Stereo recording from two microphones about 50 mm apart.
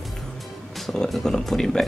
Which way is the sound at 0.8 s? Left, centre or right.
Centre.